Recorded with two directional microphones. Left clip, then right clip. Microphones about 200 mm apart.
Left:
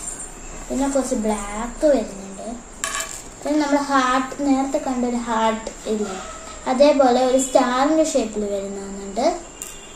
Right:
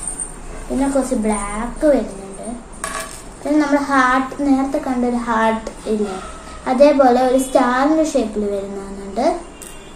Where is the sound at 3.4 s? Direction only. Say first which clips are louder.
Right 3 dB; centre (ahead or behind).